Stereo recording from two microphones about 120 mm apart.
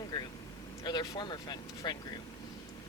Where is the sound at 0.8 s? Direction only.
35° left (ahead or behind).